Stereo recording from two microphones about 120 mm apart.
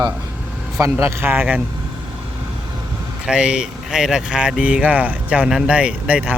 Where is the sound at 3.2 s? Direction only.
5° right (ahead or behind).